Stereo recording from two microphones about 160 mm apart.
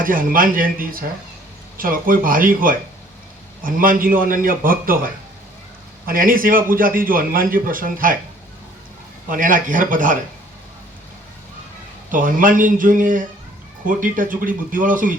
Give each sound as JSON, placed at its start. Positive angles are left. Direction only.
{"t": 0.0, "sound": "a man's voice", "side_deg": -60}
{"t": 9.3, "sound": "a man's voice", "side_deg": -55}
{"t": 12.1, "sound": "a man's voice", "side_deg": -60}